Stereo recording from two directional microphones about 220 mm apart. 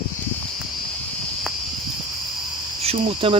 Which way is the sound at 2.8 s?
25° right (ahead or behind).